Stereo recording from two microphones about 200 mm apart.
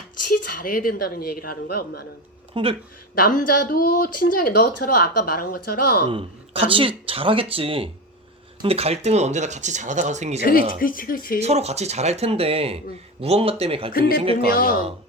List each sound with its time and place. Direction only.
0.3 s speech: 45° left (ahead or behind)
2.5 s speech: 25° right (ahead or behind)
3.2 s speech: 45° left (ahead or behind)
6.1 s speech: 25° right (ahead or behind)
10.4 s speech: 45° left (ahead or behind)
11.3 s speech: 30° right (ahead or behind)